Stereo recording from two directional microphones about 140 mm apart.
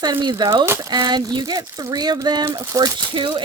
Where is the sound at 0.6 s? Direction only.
20° right (ahead or behind).